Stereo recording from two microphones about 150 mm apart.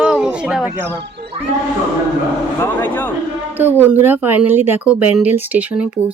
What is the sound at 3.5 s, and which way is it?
Speech, 15° right (ahead or behind).